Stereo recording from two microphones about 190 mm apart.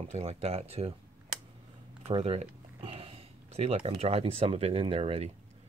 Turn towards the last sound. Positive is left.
turn(degrees=-30)  # may be behind; listen again after turning